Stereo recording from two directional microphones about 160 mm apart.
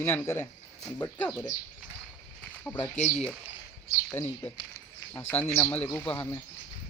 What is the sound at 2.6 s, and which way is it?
Speech, 10° left (ahead or behind).